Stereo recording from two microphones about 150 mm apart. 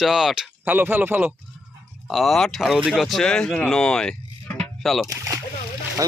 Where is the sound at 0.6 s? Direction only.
15° right (ahead or behind).